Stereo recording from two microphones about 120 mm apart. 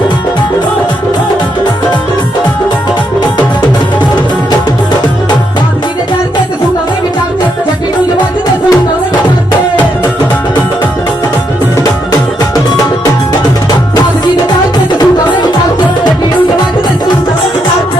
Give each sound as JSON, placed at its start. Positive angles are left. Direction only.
{"t": 14.9, "sound": "music", "side_deg": 40}